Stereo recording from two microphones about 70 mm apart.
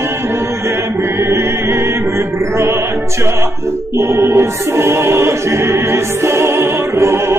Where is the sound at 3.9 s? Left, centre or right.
Right.